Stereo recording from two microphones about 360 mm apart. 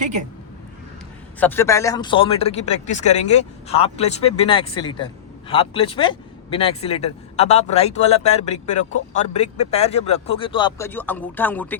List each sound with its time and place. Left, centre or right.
1.4 s speech: centre